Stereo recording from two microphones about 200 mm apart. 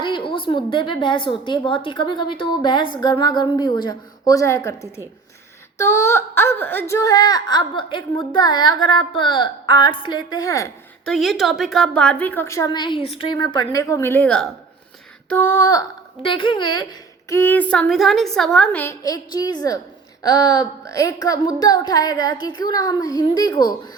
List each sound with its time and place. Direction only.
0.0 s speech: 25° left (ahead or behind)
11.0 s a woman's voice: centre (ahead or behind); by 16.8 s 25° left (ahead or behind)
17.2 s a woman's voice: 10° left (ahead or behind)